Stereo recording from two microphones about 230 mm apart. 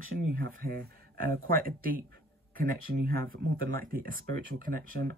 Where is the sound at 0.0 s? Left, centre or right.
Right.